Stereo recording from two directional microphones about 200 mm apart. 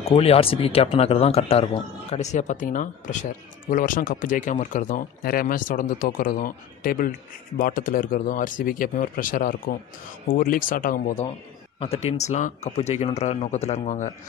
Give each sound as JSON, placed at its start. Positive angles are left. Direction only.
{"t": 0.1, "sound": "speech", "side_deg": 30}
{"t": 11.8, "sound": "speech", "side_deg": 30}